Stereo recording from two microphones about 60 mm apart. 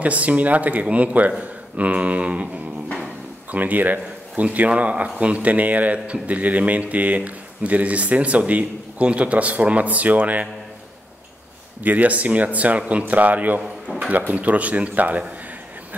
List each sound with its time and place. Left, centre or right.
0.0 s speech: right
11.8 s speech: right